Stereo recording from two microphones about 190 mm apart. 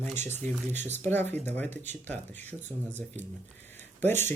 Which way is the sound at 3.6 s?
10° left (ahead or behind).